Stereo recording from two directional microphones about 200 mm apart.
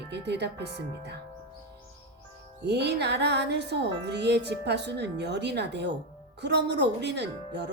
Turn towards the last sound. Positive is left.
turn(degrees=-60)  # may be behind; listen again after turning